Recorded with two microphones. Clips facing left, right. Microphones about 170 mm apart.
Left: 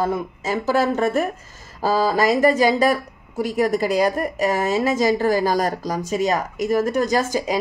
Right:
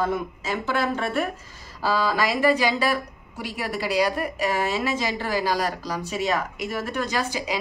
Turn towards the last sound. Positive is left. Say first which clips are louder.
# left 6 dB
turn(degrees=45)  # may be behind; listen again after turning